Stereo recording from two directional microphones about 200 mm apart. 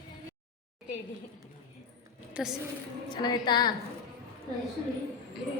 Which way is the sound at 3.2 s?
20° left (ahead or behind).